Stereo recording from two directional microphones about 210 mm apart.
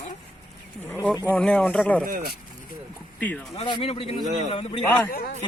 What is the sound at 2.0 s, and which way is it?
Speech, 45° right (ahead or behind).